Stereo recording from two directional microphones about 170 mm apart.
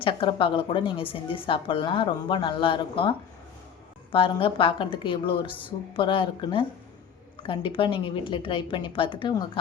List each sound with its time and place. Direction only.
0.0 s a woman's voice: 30° left (ahead or behind)